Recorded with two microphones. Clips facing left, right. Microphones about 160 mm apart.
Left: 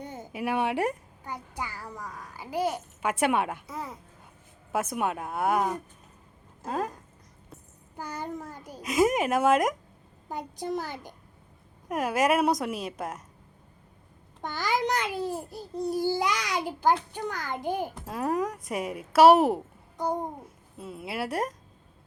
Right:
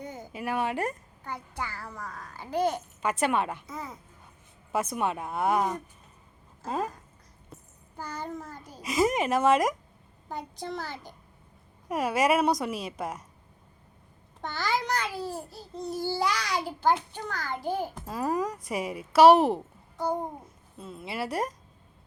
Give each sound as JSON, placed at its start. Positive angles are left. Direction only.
{"t": 0.0, "sound": "a sound", "side_deg": 30}
{"t": 0.3, "sound": "a child's voice", "side_deg": 15}
{"t": 7.9, "sound": "a child's voice", "side_deg": 15}
{"t": 8.8, "sound": "speech", "side_deg": 0}
{"t": 10.2, "sound": "a child's voice", "side_deg": 15}
{"t": 11.9, "sound": "speech", "side_deg": 0}
{"t": 14.4, "sound": "a child's voice", "side_deg": 15}
{"t": 17.9, "sound": "speech", "side_deg": 0}
{"t": 20.7, "sound": "speech", "side_deg": 5}